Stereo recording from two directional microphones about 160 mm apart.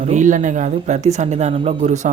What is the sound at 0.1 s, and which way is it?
Speech, 50° right (ahead or behind).